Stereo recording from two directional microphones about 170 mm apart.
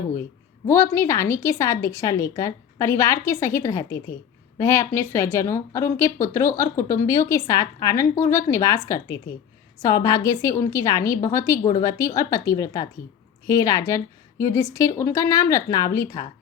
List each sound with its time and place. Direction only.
0.7 s a woman's voice: 15° left (ahead or behind)